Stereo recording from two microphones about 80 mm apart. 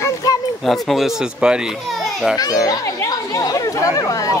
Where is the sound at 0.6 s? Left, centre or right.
Centre.